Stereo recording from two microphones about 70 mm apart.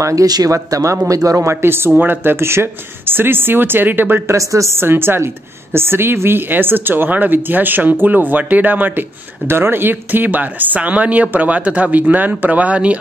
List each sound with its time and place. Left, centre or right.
0.0 s speech: right
4.3 s speech: right; by 12.9 s centre